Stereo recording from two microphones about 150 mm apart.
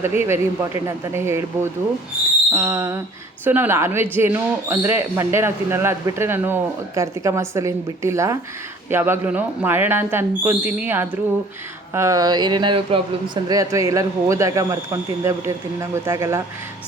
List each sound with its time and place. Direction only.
0.0 s speech: 15° right (ahead or behind)